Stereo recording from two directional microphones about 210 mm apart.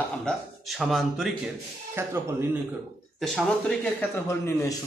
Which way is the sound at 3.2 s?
Centre (ahead or behind).